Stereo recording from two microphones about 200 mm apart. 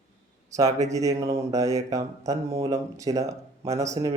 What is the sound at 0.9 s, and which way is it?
Speech, 15° right (ahead or behind).